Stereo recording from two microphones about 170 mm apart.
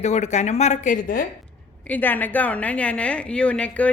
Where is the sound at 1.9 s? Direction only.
10° left (ahead or behind).